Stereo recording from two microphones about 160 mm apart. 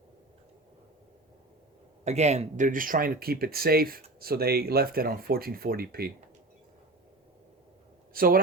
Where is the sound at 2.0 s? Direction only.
45° right (ahead or behind); by 6.1 s 70° right (ahead or behind).